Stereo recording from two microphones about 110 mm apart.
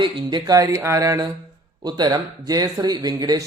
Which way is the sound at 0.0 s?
40° right (ahead or behind).